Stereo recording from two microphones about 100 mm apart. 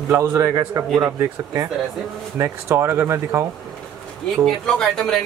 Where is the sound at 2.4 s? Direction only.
25° right (ahead or behind).